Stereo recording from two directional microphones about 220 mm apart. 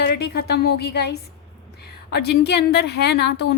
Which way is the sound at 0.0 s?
45° left (ahead or behind).